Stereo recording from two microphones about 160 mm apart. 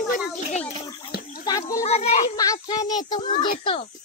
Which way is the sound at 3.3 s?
35° left (ahead or behind).